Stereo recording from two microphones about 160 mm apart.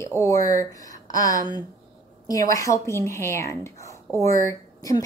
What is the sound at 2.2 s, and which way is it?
A woman's voice, 20° left (ahead or behind).